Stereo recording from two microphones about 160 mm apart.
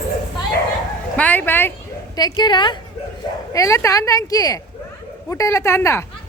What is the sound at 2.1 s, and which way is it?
Speech, 25° left (ahead or behind).